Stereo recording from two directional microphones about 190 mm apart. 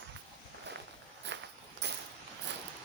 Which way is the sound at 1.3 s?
70° right (ahead or behind).